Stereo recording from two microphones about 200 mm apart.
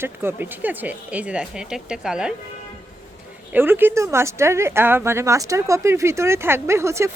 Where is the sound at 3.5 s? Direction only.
10° right (ahead or behind).